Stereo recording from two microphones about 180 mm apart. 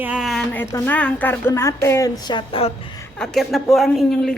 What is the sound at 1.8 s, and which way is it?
Music, 15° left (ahead or behind).